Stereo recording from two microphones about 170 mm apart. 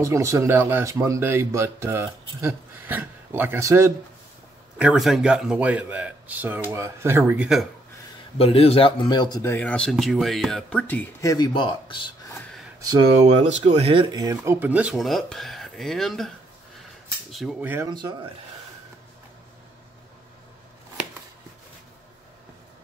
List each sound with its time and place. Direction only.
0.0 s speech: 15° right (ahead or behind)
4.7 s speech: 5° right (ahead or behind)
8.4 s speech: 35° left (ahead or behind)
13.1 s speech: 40° right (ahead or behind); by 16.3 s centre (ahead or behind)
17.3 s speech: centre (ahead or behind)
17.6 s speech: 10° right (ahead or behind)
17.8 s speech: 25° right (ahead or behind)